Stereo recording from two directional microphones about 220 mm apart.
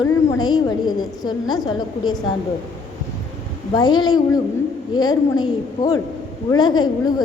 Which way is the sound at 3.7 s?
20° left (ahead or behind).